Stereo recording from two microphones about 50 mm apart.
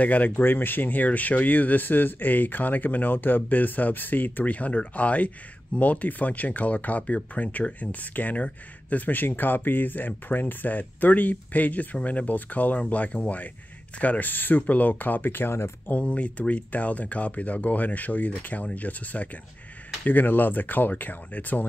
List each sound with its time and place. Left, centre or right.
0.0 s speech: left
15.9 s speech: left